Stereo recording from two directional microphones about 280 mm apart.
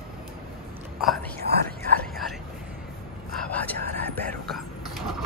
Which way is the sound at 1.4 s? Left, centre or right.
Right.